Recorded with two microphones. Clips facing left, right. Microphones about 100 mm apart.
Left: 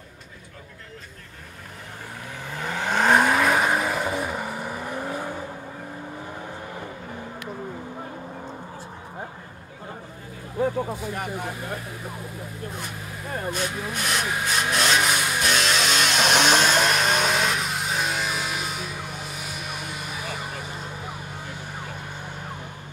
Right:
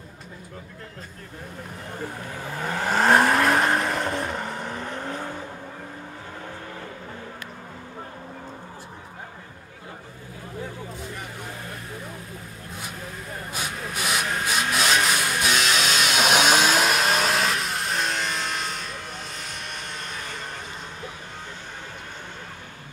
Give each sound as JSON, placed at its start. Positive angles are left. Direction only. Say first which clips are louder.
{"t": 2.4, "sound": "vehicle", "louder": "right 1 dB", "side_deg": -5}
{"t": 10.6, "sound": "vehicle", "louder": "left 12 dB", "side_deg": 55}
{"t": 13.5, "sound": "vehicle", "louder": "left 3 dB", "side_deg": -5}